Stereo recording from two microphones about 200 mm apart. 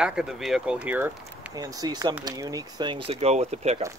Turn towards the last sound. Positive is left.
turn(degrees=-35)  # may be behind; listen again after turning